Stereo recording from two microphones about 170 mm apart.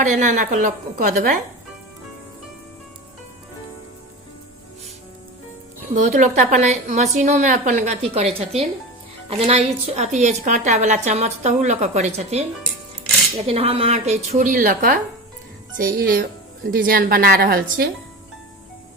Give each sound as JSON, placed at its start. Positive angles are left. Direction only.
{"t": 0.0, "sound": "a woman's voice", "side_deg": -45}
{"t": 5.9, "sound": "a woman's voice", "side_deg": -45}
{"t": 13.4, "sound": "a woman's voice", "side_deg": -35}